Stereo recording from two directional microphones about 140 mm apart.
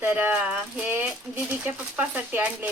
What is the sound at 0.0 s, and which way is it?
Speech, 10° right (ahead or behind).